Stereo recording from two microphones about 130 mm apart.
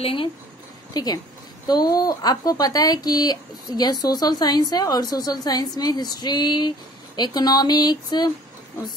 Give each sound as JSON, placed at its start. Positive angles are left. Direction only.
{"t": 0.0, "sound": "speech", "side_deg": 40}
{"t": 0.9, "sound": "speech", "side_deg": 30}